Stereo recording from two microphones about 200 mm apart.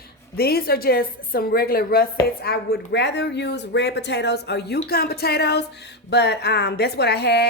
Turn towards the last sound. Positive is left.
turn(degrees=55)  # may be behind; listen again after turning